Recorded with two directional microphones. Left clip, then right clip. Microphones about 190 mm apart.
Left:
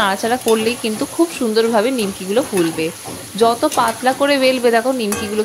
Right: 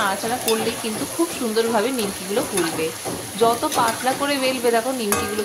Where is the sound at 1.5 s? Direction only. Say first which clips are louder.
Left 4 dB; 30° left (ahead or behind).